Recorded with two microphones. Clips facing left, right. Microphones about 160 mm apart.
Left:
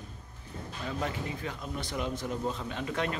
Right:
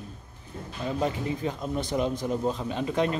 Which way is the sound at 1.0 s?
25° right (ahead or behind).